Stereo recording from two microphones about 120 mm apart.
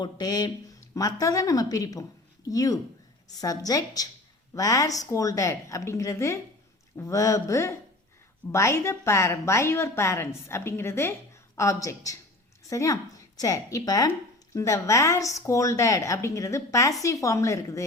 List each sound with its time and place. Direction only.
0.0 s a woman's voice: 35° left (ahead or behind)